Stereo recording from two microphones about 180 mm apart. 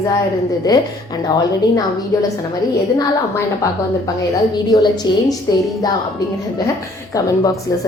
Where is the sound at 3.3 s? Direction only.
20° left (ahead or behind).